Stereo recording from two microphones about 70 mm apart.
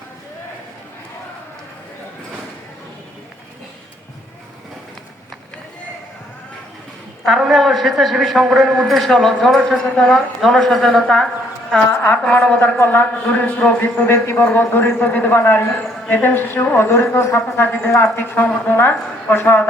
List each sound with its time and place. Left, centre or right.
7.3 s a man's voice: centre; by 14.1 s left
14.1 s a woman's voice: left
18.4 s speech: centre
18.7 s a man's voice: left